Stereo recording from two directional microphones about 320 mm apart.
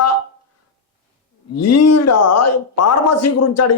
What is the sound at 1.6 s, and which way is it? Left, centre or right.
Speech, left.